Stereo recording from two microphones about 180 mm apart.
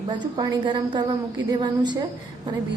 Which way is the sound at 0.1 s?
25° right (ahead or behind).